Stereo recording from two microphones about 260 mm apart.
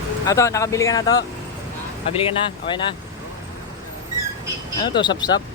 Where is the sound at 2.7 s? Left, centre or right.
Centre.